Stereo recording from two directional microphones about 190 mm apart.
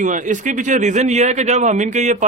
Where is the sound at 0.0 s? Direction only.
40° right (ahead or behind).